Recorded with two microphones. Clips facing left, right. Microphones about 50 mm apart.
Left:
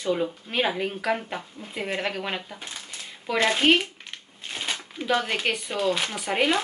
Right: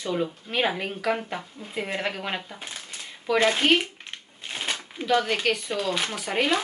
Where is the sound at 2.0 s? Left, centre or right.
Centre.